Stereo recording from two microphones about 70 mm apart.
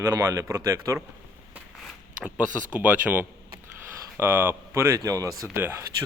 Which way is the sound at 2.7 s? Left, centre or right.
Right.